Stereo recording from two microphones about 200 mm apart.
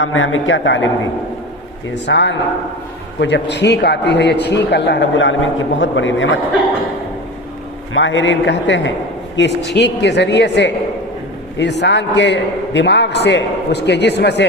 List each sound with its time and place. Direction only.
0.0 s speech: 90° left; by 0.9 s 70° left (ahead or behind)
2.0 s a man's voice: 65° left (ahead or behind)
7.9 s a man's voice: 70° left (ahead or behind)